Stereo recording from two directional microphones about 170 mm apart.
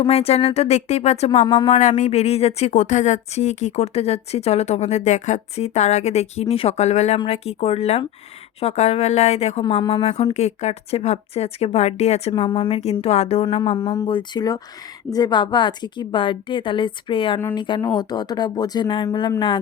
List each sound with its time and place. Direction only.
0.0 s speech: 35° left (ahead or behind)
1.5 s a woman's voice: 20° left (ahead or behind)
1.7 s speech: 45° left (ahead or behind)
12.3 s a woman's voice: 25° left (ahead or behind)